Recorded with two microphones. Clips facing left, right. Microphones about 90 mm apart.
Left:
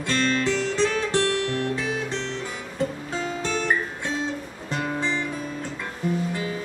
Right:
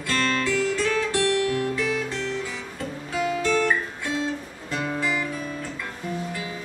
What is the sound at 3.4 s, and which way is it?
Guitar, 65° right (ahead or behind).